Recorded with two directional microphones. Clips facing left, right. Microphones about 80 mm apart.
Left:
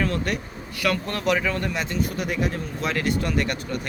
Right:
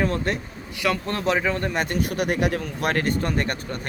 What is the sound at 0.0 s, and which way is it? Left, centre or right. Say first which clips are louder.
Speech: right 1 dB; right.